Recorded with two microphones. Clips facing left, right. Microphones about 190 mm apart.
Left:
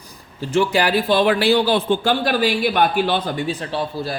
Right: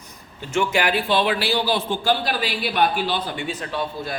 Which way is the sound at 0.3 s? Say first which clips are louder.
Left 4 dB; 35° left (ahead or behind).